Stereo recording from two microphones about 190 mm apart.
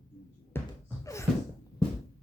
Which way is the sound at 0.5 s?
10° left (ahead or behind).